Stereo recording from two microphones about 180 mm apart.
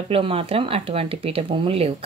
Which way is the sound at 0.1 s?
30° right (ahead or behind).